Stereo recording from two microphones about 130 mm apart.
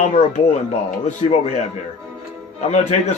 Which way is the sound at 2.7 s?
65° left (ahead or behind).